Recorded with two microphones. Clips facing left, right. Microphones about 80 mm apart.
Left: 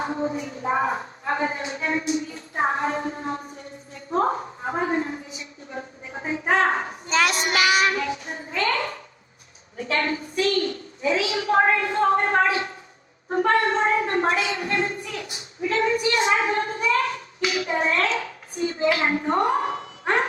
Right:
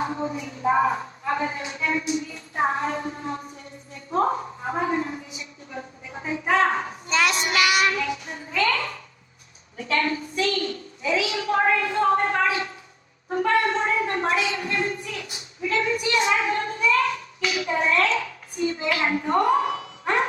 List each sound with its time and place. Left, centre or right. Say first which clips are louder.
0.0 s speech: left 1 dB; left
4.1 s a sound: even; left
9.7 s a woman's voice: right 1 dB; left